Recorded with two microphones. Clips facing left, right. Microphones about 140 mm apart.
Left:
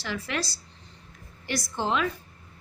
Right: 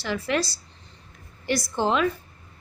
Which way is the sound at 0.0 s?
30° right (ahead or behind).